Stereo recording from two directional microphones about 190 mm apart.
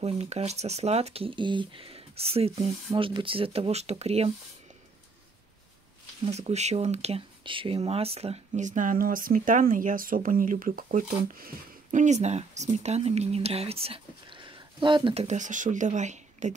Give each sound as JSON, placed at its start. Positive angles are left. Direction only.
{"t": 0.0, "sound": "speech", "side_deg": -35}
{"t": 6.2, "sound": "speech", "side_deg": -35}
{"t": 15.2, "sound": "speech", "side_deg": -40}